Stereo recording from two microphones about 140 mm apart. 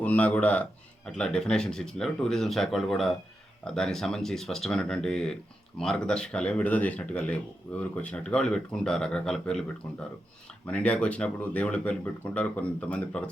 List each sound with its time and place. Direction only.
0.0 s speech: 10° left (ahead or behind)
10.7 s speech: 10° left (ahead or behind)